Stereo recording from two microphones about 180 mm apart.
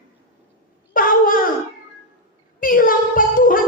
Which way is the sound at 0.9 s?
50° left (ahead or behind).